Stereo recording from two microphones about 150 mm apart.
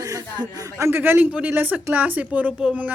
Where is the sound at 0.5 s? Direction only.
20° right (ahead or behind).